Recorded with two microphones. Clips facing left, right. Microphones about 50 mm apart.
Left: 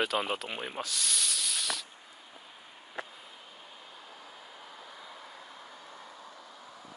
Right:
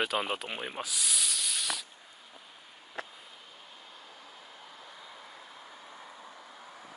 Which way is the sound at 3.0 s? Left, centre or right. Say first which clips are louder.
Even; centre.